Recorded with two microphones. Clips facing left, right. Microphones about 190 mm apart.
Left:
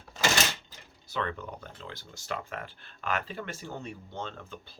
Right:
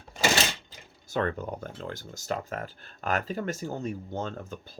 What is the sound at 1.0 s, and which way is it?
Speech, 45° right (ahead or behind).